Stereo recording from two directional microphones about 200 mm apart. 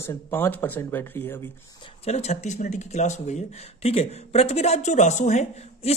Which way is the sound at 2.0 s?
35° left (ahead or behind).